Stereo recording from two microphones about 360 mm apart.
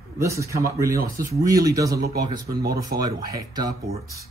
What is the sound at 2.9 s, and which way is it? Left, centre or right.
Speech, right.